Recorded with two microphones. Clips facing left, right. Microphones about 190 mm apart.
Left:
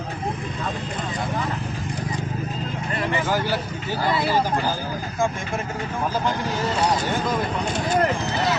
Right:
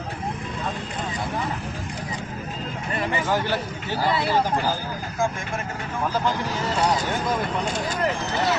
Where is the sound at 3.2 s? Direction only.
5° left (ahead or behind).